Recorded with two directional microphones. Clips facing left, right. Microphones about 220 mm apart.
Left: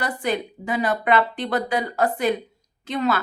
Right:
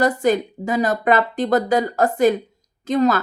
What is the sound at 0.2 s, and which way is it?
A woman's voice, 45° right (ahead or behind).